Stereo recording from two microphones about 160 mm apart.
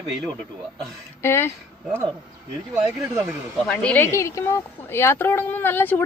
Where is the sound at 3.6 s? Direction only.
5° left (ahead or behind).